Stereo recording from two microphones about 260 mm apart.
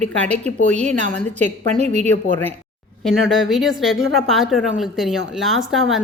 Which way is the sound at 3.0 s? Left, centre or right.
Centre.